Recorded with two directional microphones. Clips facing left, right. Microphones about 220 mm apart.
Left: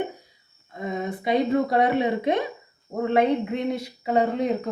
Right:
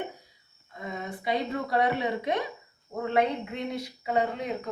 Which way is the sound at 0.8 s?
20° left (ahead or behind).